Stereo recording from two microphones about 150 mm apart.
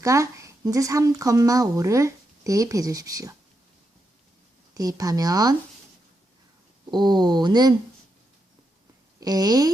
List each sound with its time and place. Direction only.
0.0 s speech: 20° right (ahead or behind)
4.7 s speech: 25° right (ahead or behind)
6.9 s speech: 30° right (ahead or behind)
9.2 s speech: 25° right (ahead or behind)